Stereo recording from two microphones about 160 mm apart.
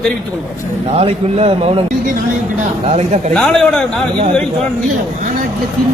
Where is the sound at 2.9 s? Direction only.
40° right (ahead or behind).